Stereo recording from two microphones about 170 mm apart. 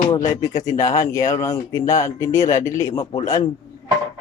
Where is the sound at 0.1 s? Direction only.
20° left (ahead or behind).